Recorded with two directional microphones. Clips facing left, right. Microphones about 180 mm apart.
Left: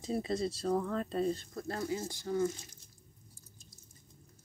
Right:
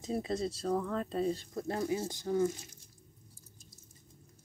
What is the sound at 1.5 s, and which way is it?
Speech, 20° right (ahead or behind).